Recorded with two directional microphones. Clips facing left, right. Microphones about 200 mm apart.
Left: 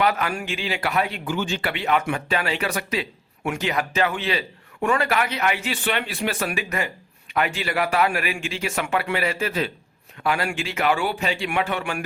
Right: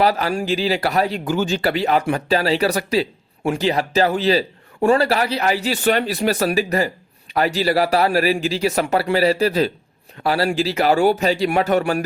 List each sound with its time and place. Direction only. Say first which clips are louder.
0.0 s speech: right 5 dB; 35° right (ahead or behind)